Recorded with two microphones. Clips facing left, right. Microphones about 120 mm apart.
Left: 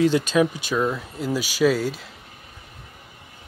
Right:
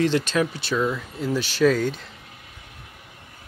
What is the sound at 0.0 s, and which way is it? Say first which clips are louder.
Speech: left 3 dB; 10° left (ahead or behind).